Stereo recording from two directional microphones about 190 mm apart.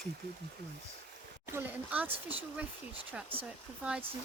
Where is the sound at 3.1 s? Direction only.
10° right (ahead or behind).